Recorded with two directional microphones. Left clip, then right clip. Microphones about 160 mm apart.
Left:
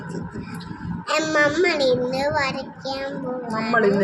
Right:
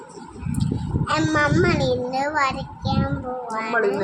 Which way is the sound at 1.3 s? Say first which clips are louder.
Left 2 dB; 5° left (ahead or behind).